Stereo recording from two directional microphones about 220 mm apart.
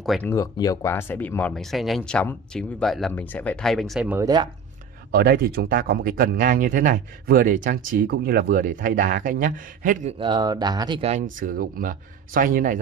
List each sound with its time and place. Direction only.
0.0 s speech: 5° left (ahead or behind)
5.1 s speech: 45° right (ahead or behind); by 11.2 s 30° right (ahead or behind)
11.3 s speech: 40° right (ahead or behind)